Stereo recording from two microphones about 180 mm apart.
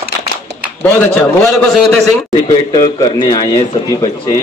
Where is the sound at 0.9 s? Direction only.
5° left (ahead or behind).